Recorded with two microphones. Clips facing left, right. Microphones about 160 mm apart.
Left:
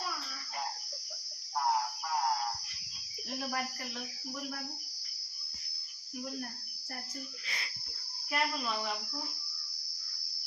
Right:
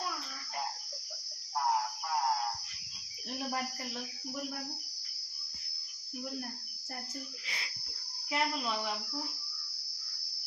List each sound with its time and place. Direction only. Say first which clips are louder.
7.4 s speech: left 1 dB; 20° right (ahead or behind)
8.3 s cricket: right 1 dB; 15° right (ahead or behind)